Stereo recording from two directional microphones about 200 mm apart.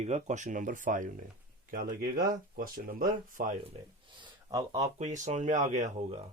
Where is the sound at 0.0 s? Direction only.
35° right (ahead or behind).